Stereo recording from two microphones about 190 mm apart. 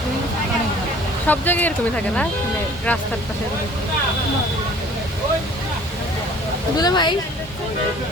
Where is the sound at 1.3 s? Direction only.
10° left (ahead or behind).